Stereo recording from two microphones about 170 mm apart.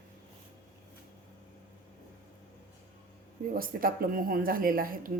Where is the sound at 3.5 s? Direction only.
55° right (ahead or behind).